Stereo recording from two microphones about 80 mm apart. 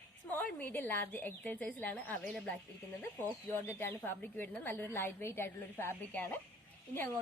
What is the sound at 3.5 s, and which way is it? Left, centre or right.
A woman's voice, left.